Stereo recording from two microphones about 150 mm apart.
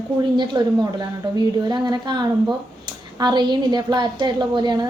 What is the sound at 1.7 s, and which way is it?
A woman's voice, 30° right (ahead or behind).